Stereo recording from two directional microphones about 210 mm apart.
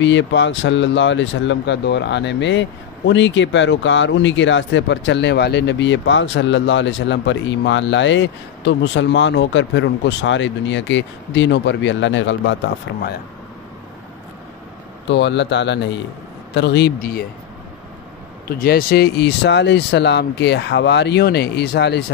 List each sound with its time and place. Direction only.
0.0 s speech: 60° left (ahead or behind)
15.0 s speech: 55° left (ahead or behind)
18.6 s speech: 45° left (ahead or behind)